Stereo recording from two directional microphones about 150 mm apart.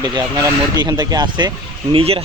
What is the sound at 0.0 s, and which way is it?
Speech, 30° right (ahead or behind).